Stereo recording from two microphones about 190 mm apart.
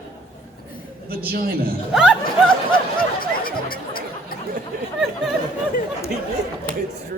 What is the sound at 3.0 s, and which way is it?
Music, 50° left (ahead or behind).